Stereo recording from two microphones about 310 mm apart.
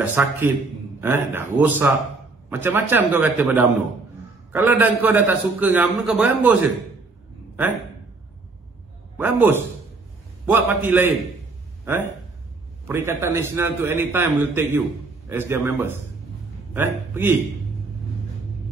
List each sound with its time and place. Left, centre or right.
0.0 s a man's voice: centre
9.1 s a man's voice: centre